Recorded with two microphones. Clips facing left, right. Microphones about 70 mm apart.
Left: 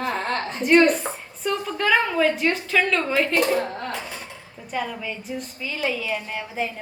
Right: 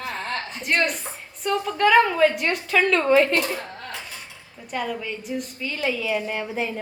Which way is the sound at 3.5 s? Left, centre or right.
Left.